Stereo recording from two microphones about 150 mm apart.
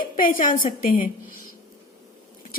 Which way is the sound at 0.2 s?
65° left (ahead or behind).